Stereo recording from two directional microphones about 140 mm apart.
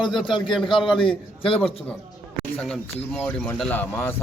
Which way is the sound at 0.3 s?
35° left (ahead or behind).